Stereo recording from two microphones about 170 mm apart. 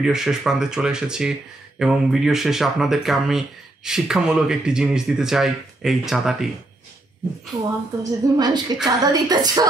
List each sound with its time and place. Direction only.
0.0 s speech: 5° right (ahead or behind)
8.0 s a woman's voice: 25° right (ahead or behind)